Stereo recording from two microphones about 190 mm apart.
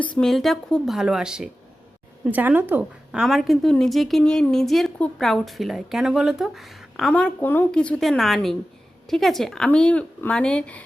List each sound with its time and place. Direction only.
0.0 s a woman's voice: 5° left (ahead or behind)